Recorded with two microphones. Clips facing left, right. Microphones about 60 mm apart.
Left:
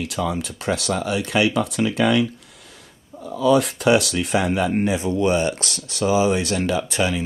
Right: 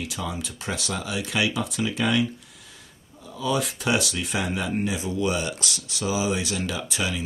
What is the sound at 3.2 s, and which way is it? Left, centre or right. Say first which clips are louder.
Speech: left 9 dB; left.